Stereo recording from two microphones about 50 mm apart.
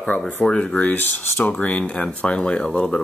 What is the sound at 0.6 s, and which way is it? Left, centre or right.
Speech, left.